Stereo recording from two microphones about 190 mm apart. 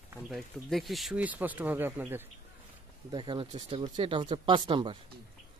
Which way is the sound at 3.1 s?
25° right (ahead or behind).